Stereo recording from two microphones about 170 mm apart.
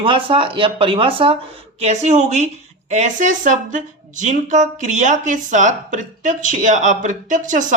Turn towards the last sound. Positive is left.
turn(degrees=-50)  # may be behind; listen again after turning